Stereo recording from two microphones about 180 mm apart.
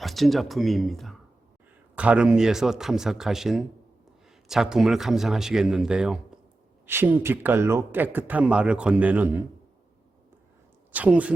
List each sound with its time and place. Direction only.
0.0 s a man's voice: centre (ahead or behind)
10.9 s speech: 10° right (ahead or behind)